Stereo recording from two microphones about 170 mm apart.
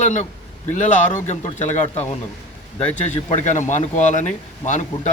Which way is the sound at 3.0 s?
45° left (ahead or behind).